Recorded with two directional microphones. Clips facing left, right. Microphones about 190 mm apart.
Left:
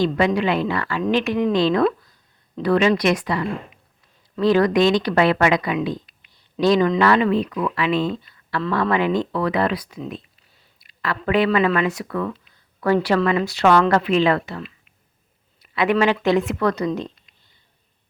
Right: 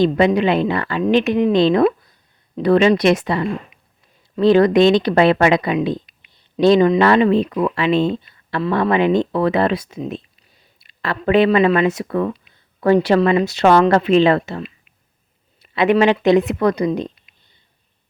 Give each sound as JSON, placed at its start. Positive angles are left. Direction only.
{"t": 0.0, "sound": "speech", "side_deg": -20}